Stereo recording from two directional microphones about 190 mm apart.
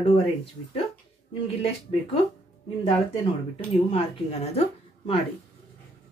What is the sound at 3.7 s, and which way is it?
Speech, 30° left (ahead or behind).